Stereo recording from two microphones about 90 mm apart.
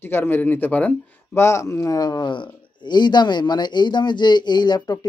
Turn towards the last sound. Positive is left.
turn(degrees=50)  # may be behind; listen again after turning